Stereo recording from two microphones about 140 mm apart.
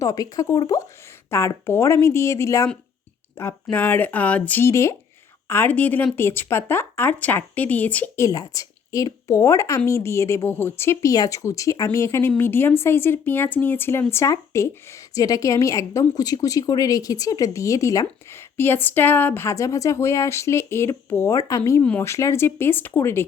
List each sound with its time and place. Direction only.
0.0 s a woman's voice: 25° left (ahead or behind)